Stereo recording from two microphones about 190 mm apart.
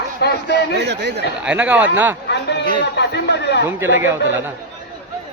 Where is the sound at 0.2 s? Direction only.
60° left (ahead or behind).